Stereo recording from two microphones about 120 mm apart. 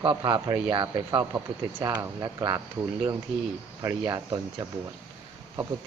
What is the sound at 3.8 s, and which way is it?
Speech, 30° right (ahead or behind).